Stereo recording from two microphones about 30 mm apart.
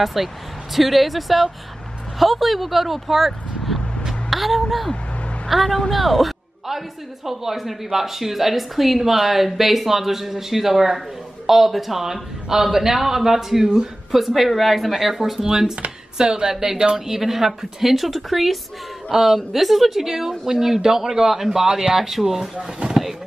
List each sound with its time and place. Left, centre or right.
0.0 s a woman's voice: centre
7.2 s a woman's voice: centre
19.0 s a woman's voice: centre